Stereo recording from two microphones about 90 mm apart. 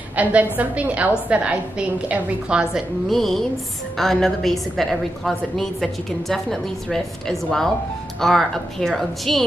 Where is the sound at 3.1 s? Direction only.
Centre (ahead or behind).